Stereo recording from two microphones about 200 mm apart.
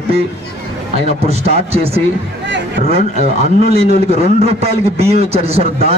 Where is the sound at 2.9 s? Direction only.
30° right (ahead or behind).